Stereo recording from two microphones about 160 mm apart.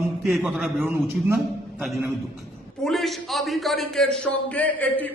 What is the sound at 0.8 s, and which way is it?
Speech, 15° right (ahead or behind).